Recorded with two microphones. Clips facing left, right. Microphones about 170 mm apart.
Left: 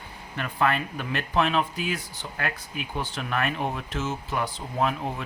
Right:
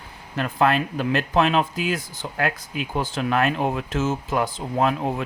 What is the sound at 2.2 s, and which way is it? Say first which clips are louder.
Speech: right 6 dB; 80° right.